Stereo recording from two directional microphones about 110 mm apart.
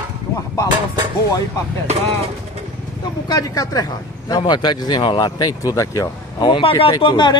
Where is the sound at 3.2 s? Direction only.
35° left (ahead or behind).